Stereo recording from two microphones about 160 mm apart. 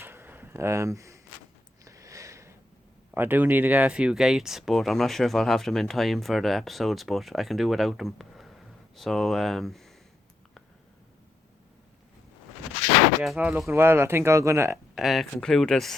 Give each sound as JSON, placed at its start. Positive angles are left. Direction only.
{"t": 0.0, "sound": "a sound", "side_deg": -15}
{"t": 1.8, "sound": "sniff", "side_deg": -20}
{"t": 3.2, "sound": "speech", "side_deg": -10}
{"t": 13.2, "sound": "speech", "side_deg": -5}
{"t": 14.9, "sound": "speech", "side_deg": 0}